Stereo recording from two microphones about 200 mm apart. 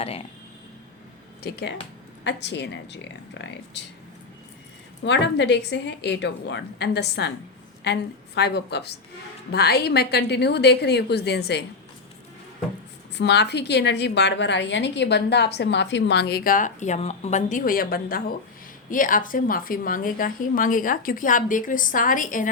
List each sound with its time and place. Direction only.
0.0 s speech: 30° left (ahead or behind)
1.5 s a woman's voice: 55° left (ahead or behind)
5.0 s a woman's voice: 60° left (ahead or behind)
13.1 s a woman's voice: 60° left (ahead or behind); by 22.4 s 40° left (ahead or behind)